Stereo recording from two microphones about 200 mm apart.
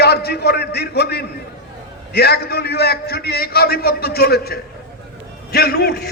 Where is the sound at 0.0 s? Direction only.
55° left (ahead or behind).